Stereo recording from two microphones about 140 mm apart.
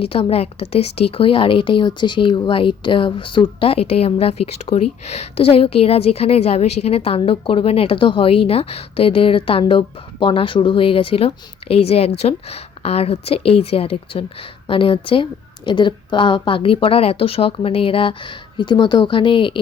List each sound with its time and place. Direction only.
0.0 s a woman's voice: 40° left (ahead or behind)